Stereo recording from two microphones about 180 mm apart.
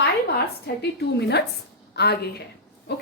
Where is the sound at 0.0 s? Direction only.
65° left (ahead or behind).